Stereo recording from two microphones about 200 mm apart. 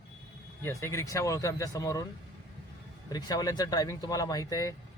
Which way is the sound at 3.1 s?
20° left (ahead or behind).